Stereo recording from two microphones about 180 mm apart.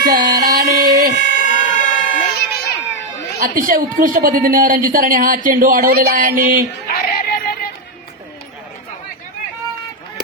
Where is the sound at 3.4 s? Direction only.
50° right (ahead or behind).